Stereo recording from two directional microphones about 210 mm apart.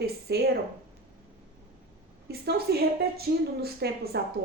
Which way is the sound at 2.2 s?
50° right (ahead or behind).